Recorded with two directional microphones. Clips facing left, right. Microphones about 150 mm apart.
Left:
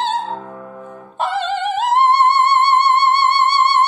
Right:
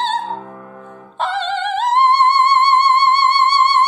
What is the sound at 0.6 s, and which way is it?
Music, 10° left (ahead or behind).